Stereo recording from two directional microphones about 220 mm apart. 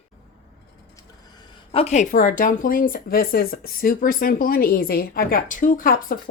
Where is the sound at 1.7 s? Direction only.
30° left (ahead or behind).